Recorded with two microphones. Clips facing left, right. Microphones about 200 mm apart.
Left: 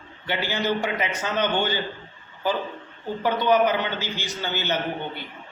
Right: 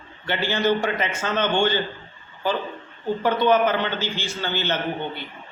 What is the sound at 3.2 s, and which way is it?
A man's voice, 15° left (ahead or behind).